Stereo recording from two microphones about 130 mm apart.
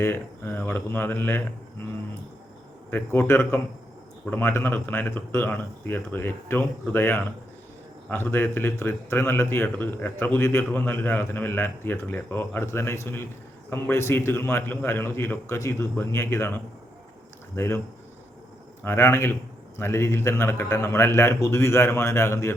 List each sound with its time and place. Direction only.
0.0 s a man's voice: 15° left (ahead or behind)
2.9 s a man's voice: 15° left (ahead or behind)
18.8 s a man's voice: 20° left (ahead or behind)